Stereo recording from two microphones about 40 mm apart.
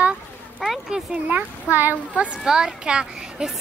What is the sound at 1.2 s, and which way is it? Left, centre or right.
Speech, right.